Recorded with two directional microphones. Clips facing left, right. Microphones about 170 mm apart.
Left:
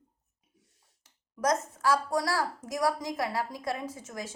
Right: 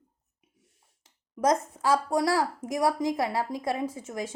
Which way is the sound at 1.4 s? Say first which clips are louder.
Right 3 dB; 25° right (ahead or behind).